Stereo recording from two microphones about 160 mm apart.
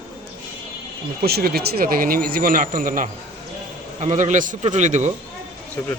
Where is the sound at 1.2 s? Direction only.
75° right (ahead or behind); by 5.1 s 50° right (ahead or behind).